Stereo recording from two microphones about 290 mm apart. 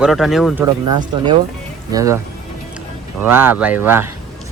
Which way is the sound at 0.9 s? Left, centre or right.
Centre.